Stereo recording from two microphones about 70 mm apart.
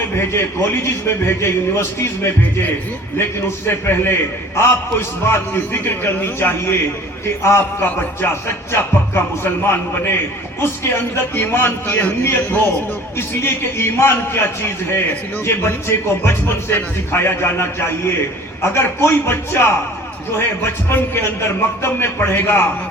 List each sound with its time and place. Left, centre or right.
0.2 s speech: left
3.7 s a man's voice: left
15.4 s speech: left
20.9 s speech: left